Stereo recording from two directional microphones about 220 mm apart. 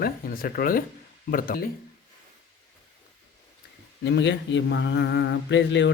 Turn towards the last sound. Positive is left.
turn(degrees=55)  # may be behind; listen again after turning